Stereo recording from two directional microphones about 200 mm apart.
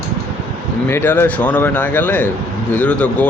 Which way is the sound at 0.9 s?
10° left (ahead or behind).